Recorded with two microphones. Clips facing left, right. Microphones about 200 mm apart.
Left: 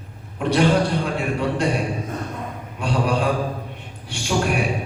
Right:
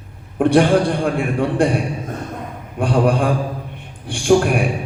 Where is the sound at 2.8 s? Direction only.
55° right (ahead or behind).